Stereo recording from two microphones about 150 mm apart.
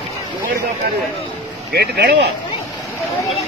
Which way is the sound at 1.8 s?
90° right.